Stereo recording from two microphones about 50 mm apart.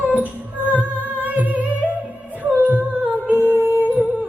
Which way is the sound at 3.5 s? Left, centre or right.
Right.